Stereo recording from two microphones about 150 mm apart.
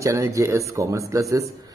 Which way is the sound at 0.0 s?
20° right (ahead or behind).